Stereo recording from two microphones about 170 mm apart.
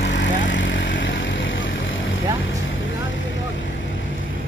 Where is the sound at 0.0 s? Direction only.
90° left.